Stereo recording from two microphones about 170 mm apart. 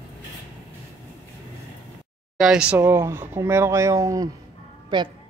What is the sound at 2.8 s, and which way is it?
Speech, 15° right (ahead or behind).